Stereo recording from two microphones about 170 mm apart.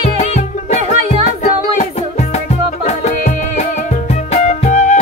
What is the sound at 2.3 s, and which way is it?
Music, 40° left (ahead or behind).